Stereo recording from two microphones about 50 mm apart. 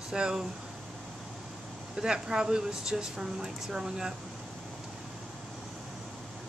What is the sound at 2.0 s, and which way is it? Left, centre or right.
Speech, centre.